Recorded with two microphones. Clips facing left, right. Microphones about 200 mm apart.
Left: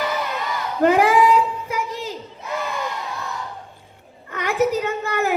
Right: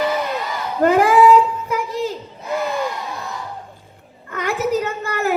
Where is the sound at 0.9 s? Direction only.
45° right (ahead or behind).